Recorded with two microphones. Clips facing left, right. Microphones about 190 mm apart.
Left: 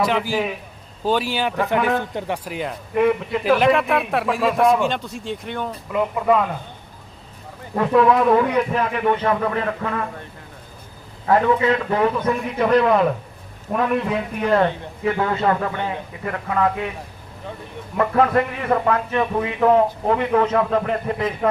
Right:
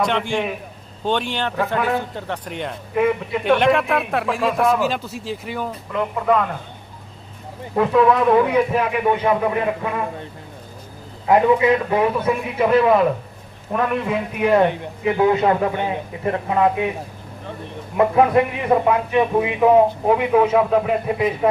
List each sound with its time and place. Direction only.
0.0 s speech: 5° left (ahead or behind)
7.8 s a man's voice: centre (ahead or behind)
11.3 s a man's voice: 15° right (ahead or behind)
17.9 s a man's voice: 15° right (ahead or behind)